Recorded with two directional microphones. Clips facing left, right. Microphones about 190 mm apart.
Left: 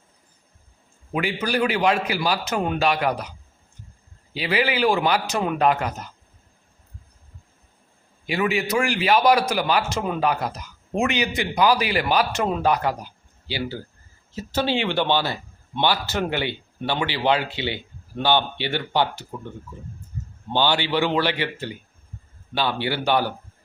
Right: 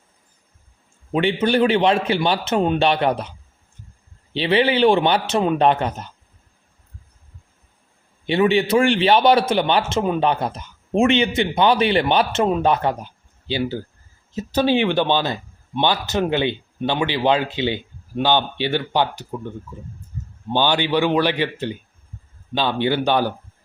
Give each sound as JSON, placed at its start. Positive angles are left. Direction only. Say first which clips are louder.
{"t": 1.1, "sound": "a man's voice", "louder": "right 6 dB", "side_deg": -25}
{"t": 4.4, "sound": "a man's voice", "louder": "right 5 dB", "side_deg": -30}
{"t": 8.3, "sound": "a man's voice", "louder": "right 6 dB", "side_deg": -30}
{"t": 20.5, "sound": "a man's voice", "louder": "right 3 dB", "side_deg": -15}